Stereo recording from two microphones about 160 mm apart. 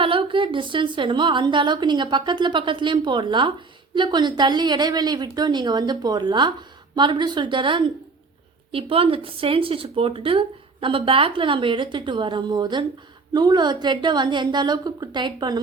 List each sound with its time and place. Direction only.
0.0 s a woman's voice: 35° right (ahead or behind)